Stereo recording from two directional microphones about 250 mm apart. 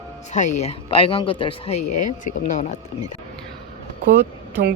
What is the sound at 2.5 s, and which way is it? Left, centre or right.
Speech, left.